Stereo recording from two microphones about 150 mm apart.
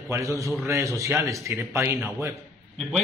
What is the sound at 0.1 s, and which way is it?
Speech, 20° right (ahead or behind).